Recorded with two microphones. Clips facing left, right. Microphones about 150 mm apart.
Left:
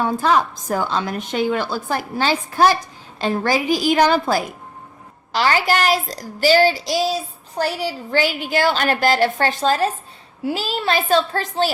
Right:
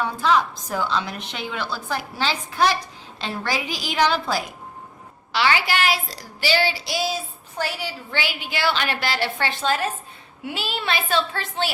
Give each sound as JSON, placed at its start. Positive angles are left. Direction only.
{"t": 0.0, "sound": "a woman's voice", "side_deg": 45}